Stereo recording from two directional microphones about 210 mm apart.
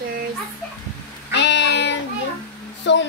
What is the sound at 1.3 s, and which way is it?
Child singing, 55° left (ahead or behind).